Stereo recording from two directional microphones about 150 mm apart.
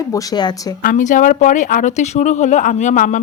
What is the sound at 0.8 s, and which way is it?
Speech, 55° left (ahead or behind).